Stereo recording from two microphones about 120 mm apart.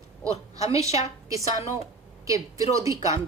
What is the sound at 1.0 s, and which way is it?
A woman's voice, 25° right (ahead or behind).